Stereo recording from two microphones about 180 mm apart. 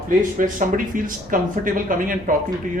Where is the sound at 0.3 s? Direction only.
45° right (ahead or behind).